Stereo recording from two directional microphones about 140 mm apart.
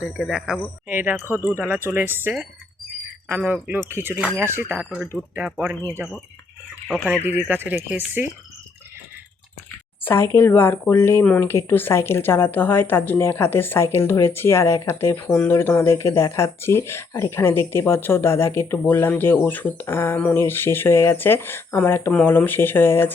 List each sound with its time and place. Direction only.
0.2 s speech: centre (ahead or behind)
0.9 s speech: 10° right (ahead or behind)
1.2 s speech: 20° left (ahead or behind)
1.5 s speech: 15° right (ahead or behind)
7.3 s speech: 15° right (ahead or behind)
10.0 s speech: 15° left (ahead or behind)